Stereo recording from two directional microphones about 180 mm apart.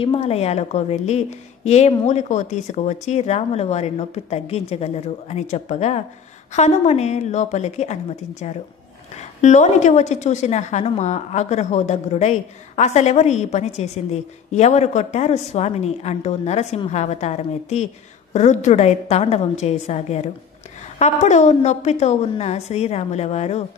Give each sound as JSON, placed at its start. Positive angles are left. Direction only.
{"t": 0.0, "sound": "a woman's voice", "side_deg": 35}